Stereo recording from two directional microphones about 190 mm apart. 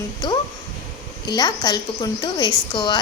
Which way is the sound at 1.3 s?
20° left (ahead or behind).